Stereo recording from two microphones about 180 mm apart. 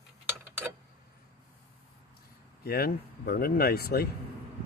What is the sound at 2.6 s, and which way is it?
Speech, 60° left (ahead or behind).